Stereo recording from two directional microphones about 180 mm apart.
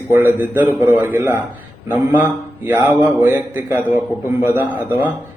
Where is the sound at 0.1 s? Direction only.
15° right (ahead or behind).